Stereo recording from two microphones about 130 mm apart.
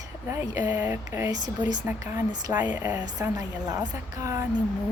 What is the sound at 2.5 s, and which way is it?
Speech, 10° right (ahead or behind).